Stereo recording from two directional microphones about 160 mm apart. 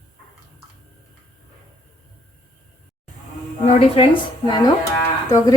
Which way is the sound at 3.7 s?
35° left (ahead or behind).